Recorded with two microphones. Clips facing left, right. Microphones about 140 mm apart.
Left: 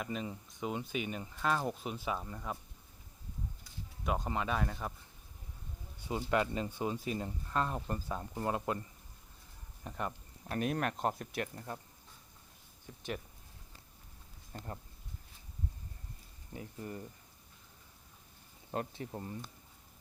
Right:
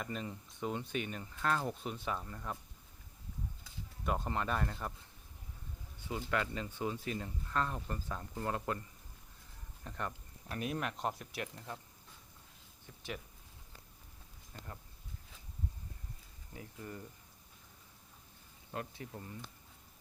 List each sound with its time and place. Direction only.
0.0 s speech: 5° left (ahead or behind)
4.0 s speech: 5° left (ahead or behind)
6.0 s speech: 15° left (ahead or behind)
9.8 s speech: 15° left (ahead or behind)
10.5 s speech: 50° left (ahead or behind)
14.5 s speech: 35° left (ahead or behind)
16.6 s speech: 25° left (ahead or behind)
18.7 s speech: 30° left (ahead or behind)